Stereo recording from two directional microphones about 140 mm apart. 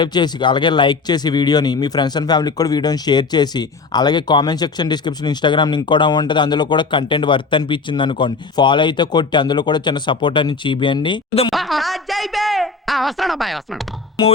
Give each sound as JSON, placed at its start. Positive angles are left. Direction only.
{"t": 0.0, "sound": "speech", "side_deg": 30}
{"t": 11.5, "sound": "speech", "side_deg": 0}